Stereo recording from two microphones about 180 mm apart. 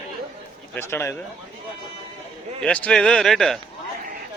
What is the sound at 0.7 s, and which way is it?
Speech, 15° left (ahead or behind).